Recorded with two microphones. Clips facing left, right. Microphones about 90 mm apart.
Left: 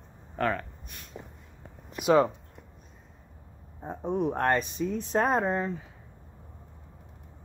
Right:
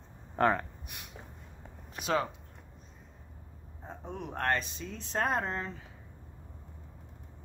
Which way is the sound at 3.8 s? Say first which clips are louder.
Left 12 dB; 20° left (ahead or behind).